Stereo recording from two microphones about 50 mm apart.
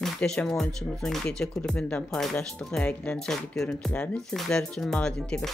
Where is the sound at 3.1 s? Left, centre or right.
Centre.